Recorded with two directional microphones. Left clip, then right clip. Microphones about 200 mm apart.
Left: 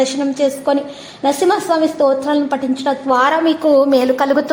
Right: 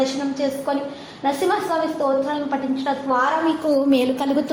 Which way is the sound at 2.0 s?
35° left (ahead or behind).